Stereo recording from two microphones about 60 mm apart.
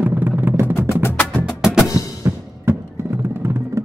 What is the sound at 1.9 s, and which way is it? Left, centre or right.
Music, left.